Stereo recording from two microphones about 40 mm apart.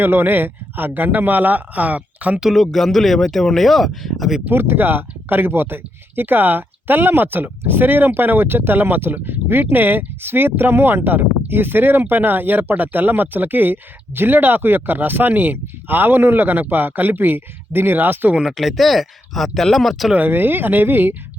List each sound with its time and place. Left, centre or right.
0.0 s speech: right
2.5 s speech: centre
4.5 s speech: right
18.5 s speech: centre
20.1 s speech: right